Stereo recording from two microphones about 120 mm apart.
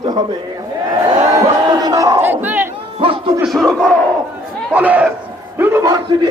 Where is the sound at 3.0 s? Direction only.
50° right (ahead or behind).